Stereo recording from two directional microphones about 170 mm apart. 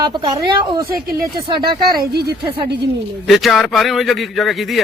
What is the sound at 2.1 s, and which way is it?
Speech, 70° right (ahead or behind).